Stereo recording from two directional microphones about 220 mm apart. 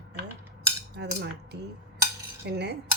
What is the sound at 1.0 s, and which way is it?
Speech, 50° right (ahead or behind).